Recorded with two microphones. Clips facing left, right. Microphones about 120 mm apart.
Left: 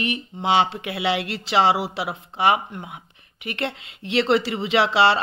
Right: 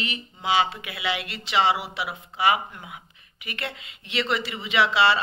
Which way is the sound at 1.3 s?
35° left (ahead or behind).